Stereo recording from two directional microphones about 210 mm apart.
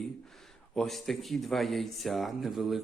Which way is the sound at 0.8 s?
Centre (ahead or behind).